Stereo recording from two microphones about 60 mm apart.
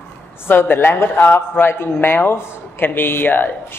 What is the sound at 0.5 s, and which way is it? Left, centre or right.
A man's voice, left.